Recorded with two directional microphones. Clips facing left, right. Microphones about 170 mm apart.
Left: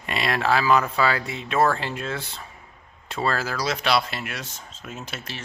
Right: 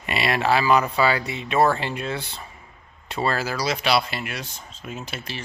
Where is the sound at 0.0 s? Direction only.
5° right (ahead or behind).